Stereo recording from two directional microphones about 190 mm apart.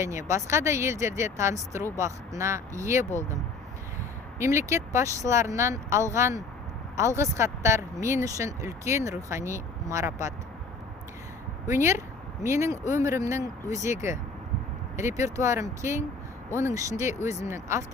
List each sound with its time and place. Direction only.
0.0 s speech: 15° right (ahead or behind)
4.4 s speech: 15° right (ahead or behind)
11.6 s speech: 15° right (ahead or behind)